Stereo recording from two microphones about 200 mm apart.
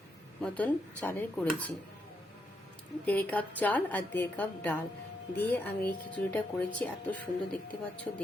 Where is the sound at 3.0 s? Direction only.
5° left (ahead or behind).